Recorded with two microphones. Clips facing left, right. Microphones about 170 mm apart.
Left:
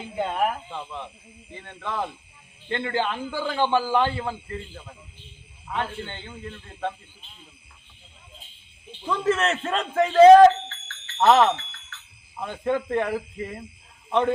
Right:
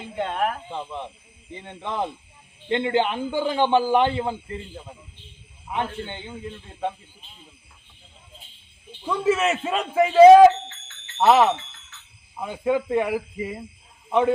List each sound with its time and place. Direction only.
0.0 s speech: 5° left (ahead or behind)
0.7 s a man's voice: 20° right (ahead or behind)
9.0 s a man's voice: 10° right (ahead or behind)